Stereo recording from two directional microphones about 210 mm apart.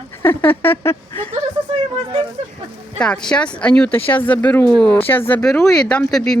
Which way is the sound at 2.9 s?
5° left (ahead or behind).